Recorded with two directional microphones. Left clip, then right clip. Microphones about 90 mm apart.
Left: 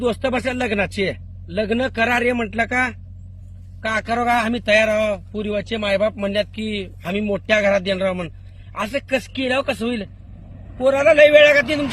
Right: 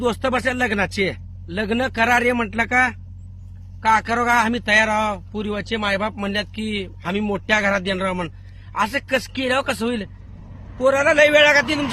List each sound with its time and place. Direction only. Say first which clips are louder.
0.0 s speech: even; 30° right (ahead or behind)
3.8 s speech: right 2 dB; 35° right (ahead or behind)
4.7 s speech: left 2 dB; 25° right (ahead or behind)